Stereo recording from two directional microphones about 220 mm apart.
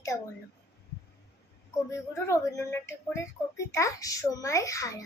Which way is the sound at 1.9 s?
15° left (ahead or behind).